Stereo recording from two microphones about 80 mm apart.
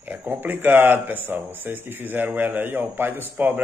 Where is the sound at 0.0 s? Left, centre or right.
Right.